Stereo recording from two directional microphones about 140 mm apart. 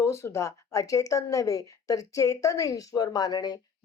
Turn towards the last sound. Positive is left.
turn(degrees=30)  # may be behind; listen again after turning